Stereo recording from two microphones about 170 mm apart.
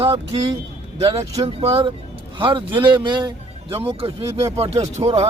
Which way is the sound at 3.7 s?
35° right (ahead or behind).